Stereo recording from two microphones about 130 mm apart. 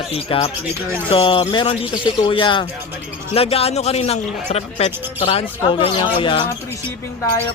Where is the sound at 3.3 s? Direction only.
50° left (ahead or behind).